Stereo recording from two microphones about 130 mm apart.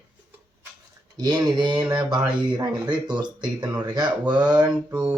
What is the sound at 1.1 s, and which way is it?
Speech, 30° right (ahead or behind).